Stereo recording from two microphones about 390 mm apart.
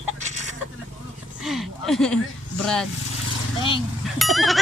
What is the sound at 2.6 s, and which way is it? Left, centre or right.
Speech, centre.